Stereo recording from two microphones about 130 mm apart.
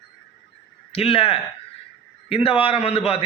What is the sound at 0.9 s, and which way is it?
A man's voice, 50° left (ahead or behind).